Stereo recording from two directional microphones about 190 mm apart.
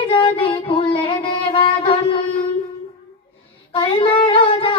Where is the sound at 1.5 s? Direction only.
30° left (ahead or behind).